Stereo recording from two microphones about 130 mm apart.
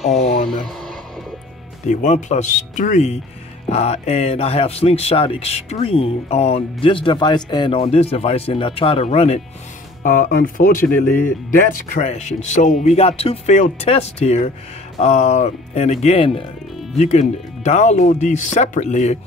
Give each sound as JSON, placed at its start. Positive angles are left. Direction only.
{"t": 0.2, "sound": "a sound", "side_deg": 55}
{"t": 0.7, "sound": "music", "side_deg": 0}
{"t": 1.9, "sound": "speech", "side_deg": 70}
{"t": 3.6, "sound": "speech", "side_deg": 55}
{"t": 10.0, "sound": "speech", "side_deg": 90}
{"t": 10.8, "sound": "speech", "side_deg": 15}
{"t": 11.9, "sound": "speech", "side_deg": 65}
{"t": 12.8, "sound": "speech", "side_deg": 50}
{"t": 17.0, "sound": "speech", "side_deg": 60}